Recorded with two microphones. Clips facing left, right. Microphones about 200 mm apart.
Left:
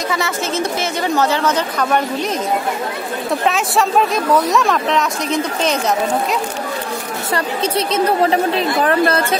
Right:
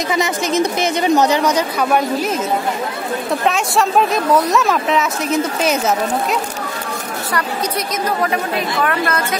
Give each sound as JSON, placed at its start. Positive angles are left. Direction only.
{"t": 0.1, "sound": "speech", "side_deg": -15}
{"t": 3.4, "sound": "speech", "side_deg": 0}
{"t": 7.3, "sound": "a woman's voice", "side_deg": 30}